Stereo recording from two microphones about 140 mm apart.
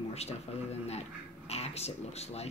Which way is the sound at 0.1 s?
50° left (ahead or behind).